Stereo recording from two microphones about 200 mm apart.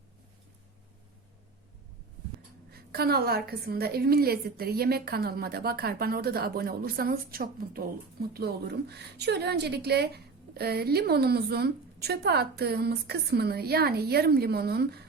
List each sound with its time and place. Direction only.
2.7 s a woman's voice: 50° right (ahead or behind)